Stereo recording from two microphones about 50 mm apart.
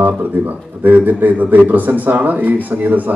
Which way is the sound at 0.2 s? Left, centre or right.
Right.